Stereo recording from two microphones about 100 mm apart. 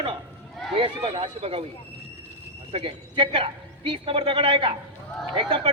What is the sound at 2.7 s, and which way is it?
Speech, 60° right (ahead or behind).